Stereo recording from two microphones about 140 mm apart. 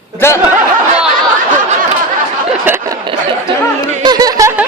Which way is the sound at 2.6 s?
15° right (ahead or behind).